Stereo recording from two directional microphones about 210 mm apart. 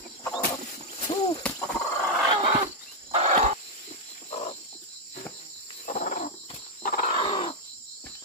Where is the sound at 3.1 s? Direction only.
30° right (ahead or behind).